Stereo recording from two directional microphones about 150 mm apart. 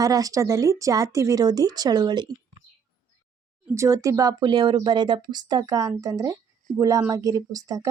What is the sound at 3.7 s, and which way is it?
Speech, 20° right (ahead or behind).